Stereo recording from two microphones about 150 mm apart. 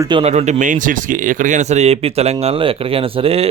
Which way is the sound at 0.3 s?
45° right (ahead or behind).